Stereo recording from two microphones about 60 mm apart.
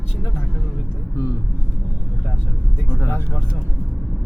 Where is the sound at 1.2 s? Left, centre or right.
Left.